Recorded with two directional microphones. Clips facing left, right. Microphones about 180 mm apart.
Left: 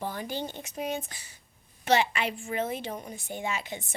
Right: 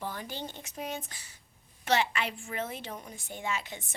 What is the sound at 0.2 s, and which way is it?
A woman's voice, 5° left (ahead or behind).